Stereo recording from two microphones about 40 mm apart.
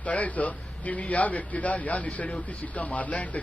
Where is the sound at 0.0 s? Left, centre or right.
Left.